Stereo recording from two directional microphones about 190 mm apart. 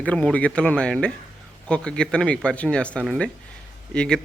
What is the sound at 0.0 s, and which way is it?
Speech, 5° left (ahead or behind).